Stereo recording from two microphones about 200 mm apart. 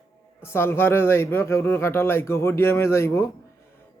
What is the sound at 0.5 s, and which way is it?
Speech, 10° left (ahead or behind).